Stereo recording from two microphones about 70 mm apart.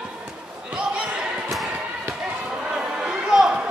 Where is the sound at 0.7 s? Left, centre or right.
Centre.